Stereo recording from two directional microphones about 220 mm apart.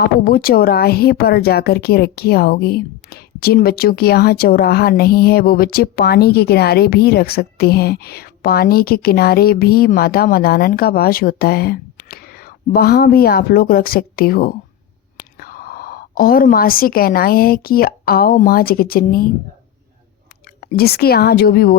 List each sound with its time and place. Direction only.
0.1 s speech: 45° left (ahead or behind)
20.6 s speech: 45° left (ahead or behind)